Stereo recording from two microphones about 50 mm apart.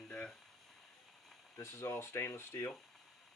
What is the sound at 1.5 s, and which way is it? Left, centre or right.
Speech, left.